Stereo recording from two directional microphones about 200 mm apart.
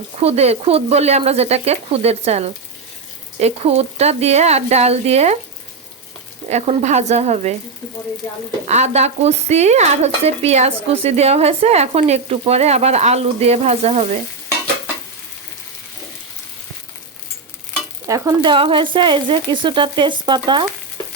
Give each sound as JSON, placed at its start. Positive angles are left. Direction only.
{"t": 0.2, "sound": "speech", "side_deg": -30}
{"t": 6.5, "sound": "speech", "side_deg": -35}
{"t": 8.6, "sound": "speech", "side_deg": -35}
{"t": 18.1, "sound": "speech", "side_deg": -20}